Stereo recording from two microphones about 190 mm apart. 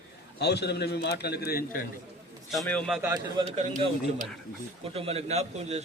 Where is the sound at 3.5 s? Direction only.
35° right (ahead or behind).